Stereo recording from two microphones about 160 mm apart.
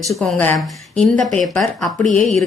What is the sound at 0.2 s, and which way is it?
A woman's voice, 10° left (ahead or behind).